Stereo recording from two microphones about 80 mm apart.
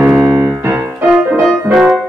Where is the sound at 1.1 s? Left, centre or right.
Centre.